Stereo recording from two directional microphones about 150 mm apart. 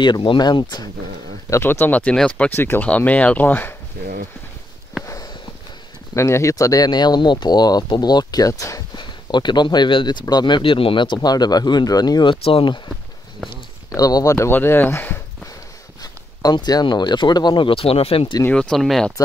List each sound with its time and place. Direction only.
0.0 s speech: 30° left (ahead or behind)
1.5 s speech: 15° left (ahead or behind)
4.0 s speech: 75° right (ahead or behind)
5.0 s walk: 20° left (ahead or behind)
6.1 s speech: 20° left (ahead or behind)
16.0 s speech: 25° left (ahead or behind)
18.4 s speech: 5° left (ahead or behind)